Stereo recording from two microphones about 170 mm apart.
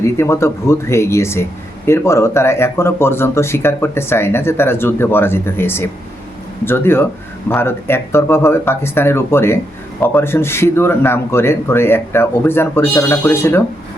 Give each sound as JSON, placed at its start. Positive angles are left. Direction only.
{"t": 0.0, "sound": "speech", "side_deg": 15}